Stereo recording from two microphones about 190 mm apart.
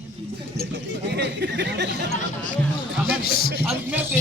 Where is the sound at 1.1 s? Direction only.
65° right (ahead or behind).